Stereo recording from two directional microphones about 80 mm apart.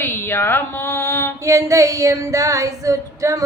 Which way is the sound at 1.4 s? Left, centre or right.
Right.